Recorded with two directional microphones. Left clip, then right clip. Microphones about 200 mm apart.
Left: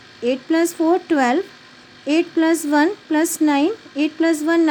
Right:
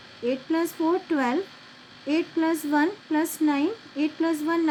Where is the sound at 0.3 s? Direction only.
45° left (ahead or behind).